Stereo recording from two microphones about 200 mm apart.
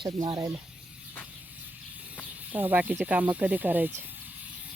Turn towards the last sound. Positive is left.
turn(degrees=-10)  # may be behind; listen again after turning